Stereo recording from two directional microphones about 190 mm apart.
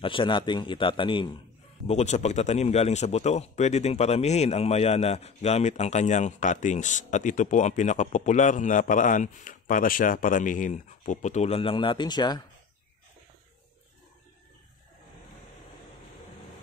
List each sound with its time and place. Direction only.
0.0 s a man's voice: 25° left (ahead or behind)
1.9 s speech: 35° left (ahead or behind)